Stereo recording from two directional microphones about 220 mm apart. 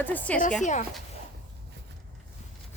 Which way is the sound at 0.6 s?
35° left (ahead or behind).